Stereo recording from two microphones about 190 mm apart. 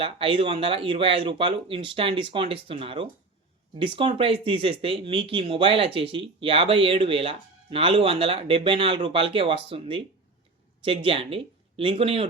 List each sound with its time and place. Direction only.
0.0 s speech: 30° right (ahead or behind)